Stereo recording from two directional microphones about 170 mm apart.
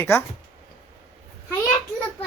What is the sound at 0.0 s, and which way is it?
Speech, 15° left (ahead or behind).